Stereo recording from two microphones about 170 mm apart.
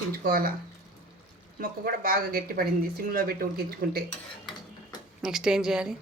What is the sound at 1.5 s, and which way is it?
A woman's voice, 55° right (ahead or behind).